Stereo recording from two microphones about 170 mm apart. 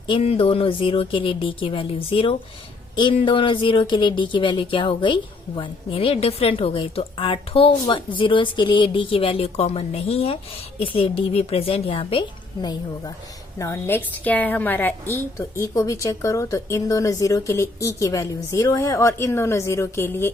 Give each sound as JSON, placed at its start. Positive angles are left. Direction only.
{"t": 0.1, "sound": "speech", "side_deg": 35}
{"t": 13.6, "sound": "a woman's voice", "side_deg": 15}